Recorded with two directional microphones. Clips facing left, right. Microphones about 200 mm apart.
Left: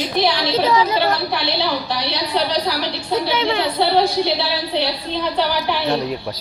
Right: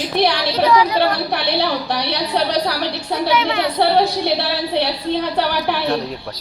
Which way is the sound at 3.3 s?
30° left (ahead or behind).